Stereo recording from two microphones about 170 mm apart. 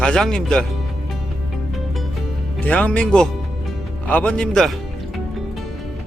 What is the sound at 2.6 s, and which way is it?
A man's voice, 10° left (ahead or behind).